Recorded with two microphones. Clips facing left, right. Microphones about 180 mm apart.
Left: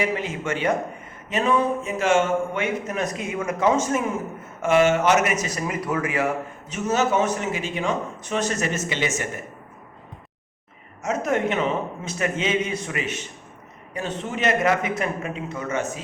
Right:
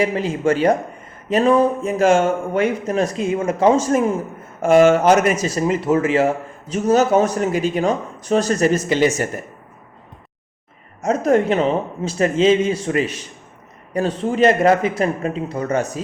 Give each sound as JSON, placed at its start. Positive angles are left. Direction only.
{"t": 0.0, "sound": "speech", "side_deg": -35}
{"t": 11.0, "sound": "speech", "side_deg": -35}